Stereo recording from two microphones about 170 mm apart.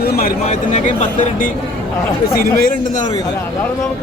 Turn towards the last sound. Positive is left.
turn(degrees=60)  # may be behind; listen again after turning